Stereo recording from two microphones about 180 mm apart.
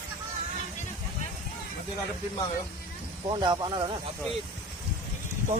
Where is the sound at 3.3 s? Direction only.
25° right (ahead or behind).